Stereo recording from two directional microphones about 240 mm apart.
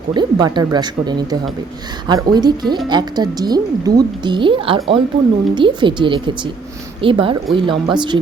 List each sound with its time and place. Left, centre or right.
0.1 s speech: centre